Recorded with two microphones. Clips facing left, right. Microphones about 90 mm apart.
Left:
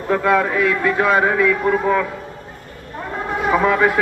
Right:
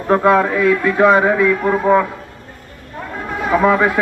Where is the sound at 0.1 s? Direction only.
35° right (ahead or behind).